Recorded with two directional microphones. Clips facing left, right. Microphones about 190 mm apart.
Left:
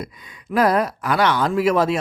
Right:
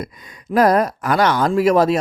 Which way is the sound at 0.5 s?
45° right (ahead or behind).